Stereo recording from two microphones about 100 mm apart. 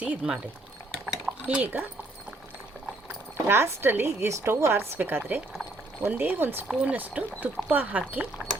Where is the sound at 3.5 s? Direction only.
25° right (ahead or behind).